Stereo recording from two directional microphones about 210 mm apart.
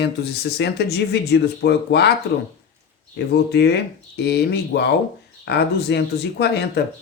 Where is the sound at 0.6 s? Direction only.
55° left (ahead or behind).